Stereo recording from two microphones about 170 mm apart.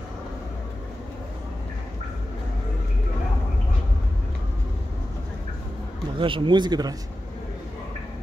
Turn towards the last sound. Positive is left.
turn(degrees=-25)  # may be behind; listen again after turning